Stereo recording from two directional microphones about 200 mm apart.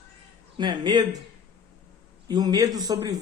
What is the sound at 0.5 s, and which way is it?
Speech, 20° right (ahead or behind).